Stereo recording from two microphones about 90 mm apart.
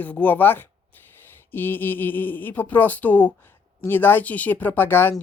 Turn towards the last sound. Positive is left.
turn(degrees=25)  # may be behind; listen again after turning